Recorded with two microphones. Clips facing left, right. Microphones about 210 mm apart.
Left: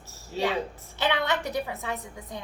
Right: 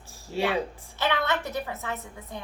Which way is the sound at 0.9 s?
15° left (ahead or behind).